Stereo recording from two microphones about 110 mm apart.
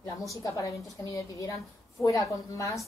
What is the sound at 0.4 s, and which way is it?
Speech, 30° left (ahead or behind).